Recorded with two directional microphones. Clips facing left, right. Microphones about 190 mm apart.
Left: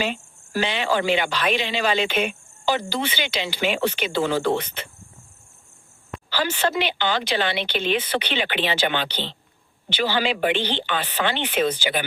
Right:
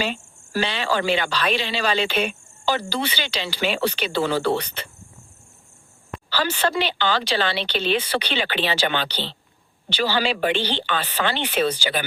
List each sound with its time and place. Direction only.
0.0 s speech: 15° left (ahead or behind)
6.3 s speech: 15° left (ahead or behind)